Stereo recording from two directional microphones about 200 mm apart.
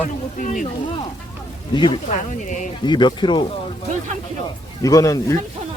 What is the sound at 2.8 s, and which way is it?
Speech, 20° left (ahead or behind).